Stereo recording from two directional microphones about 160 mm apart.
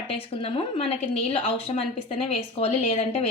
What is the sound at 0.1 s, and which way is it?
Speech, 35° left (ahead or behind).